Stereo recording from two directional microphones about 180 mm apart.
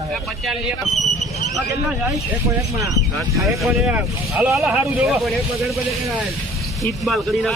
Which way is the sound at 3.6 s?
Centre (ahead or behind).